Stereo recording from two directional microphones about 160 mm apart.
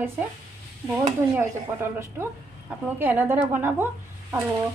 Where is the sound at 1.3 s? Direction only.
15° right (ahead or behind).